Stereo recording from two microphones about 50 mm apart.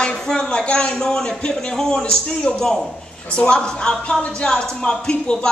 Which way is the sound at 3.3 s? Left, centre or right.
Left.